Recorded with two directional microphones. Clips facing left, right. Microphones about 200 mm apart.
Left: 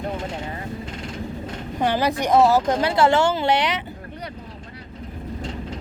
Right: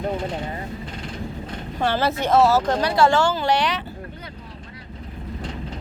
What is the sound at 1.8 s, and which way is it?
Speech, 15° left (ahead or behind).